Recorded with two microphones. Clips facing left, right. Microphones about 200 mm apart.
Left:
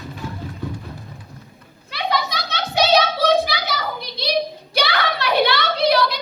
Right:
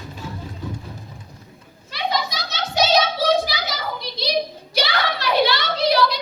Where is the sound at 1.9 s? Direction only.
60° left (ahead or behind).